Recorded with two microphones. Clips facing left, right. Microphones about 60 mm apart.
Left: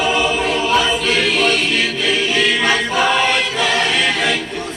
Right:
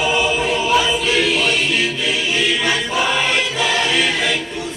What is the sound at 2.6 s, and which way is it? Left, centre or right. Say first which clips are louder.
Choir: left 3 dB; left.